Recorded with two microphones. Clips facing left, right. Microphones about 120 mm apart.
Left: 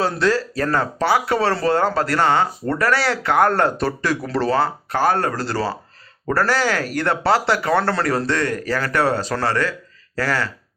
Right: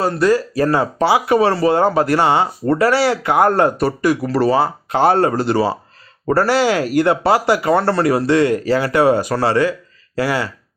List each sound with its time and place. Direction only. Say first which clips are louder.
0.1 s speech: right 4 dB; 10° right (ahead or behind)
4.9 s speech: right 8 dB; 20° right (ahead or behind)